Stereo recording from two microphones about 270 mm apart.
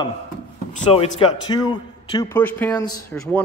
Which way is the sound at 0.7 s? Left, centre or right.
Left.